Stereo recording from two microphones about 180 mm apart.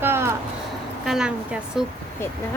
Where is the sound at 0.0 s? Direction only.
15° right (ahead or behind).